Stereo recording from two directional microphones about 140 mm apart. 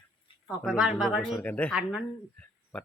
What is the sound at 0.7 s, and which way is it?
Speech, 5° right (ahead or behind).